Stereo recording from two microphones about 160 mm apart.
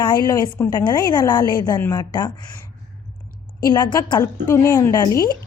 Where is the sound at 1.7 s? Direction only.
15° left (ahead or behind).